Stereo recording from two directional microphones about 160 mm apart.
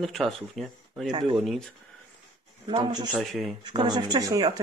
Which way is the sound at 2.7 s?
30° right (ahead or behind).